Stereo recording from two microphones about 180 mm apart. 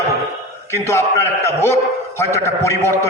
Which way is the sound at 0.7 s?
15° left (ahead or behind).